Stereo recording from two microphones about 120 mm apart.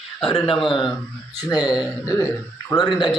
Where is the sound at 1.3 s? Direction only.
35° left (ahead or behind).